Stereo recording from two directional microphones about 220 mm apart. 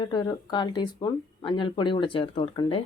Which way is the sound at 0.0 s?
20° left (ahead or behind).